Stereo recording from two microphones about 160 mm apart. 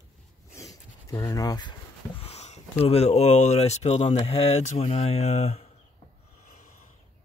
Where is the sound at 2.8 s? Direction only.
40° left (ahead or behind).